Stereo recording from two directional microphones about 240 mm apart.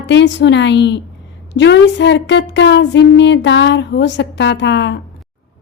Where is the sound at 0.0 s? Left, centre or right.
Left.